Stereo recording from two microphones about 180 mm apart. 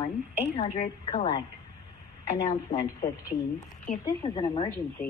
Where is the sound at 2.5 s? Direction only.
35° left (ahead or behind).